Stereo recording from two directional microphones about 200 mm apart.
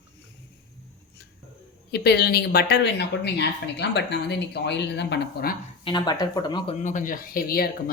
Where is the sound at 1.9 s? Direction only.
55° left (ahead or behind).